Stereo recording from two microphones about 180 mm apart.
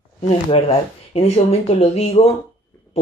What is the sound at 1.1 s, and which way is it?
Speech, 35° left (ahead or behind).